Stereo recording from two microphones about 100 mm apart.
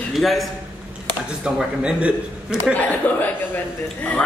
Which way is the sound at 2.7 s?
20° left (ahead or behind).